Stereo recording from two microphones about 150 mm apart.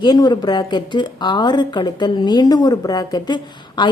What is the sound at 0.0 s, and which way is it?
A woman's voice, 30° left (ahead or behind).